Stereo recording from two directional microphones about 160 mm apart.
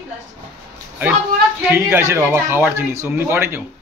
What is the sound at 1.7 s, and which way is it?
Speech, 15° right (ahead or behind).